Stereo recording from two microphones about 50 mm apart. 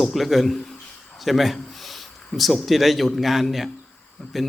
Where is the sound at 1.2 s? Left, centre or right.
Centre.